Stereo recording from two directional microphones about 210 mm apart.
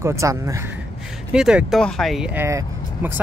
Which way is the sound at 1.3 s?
5° right (ahead or behind).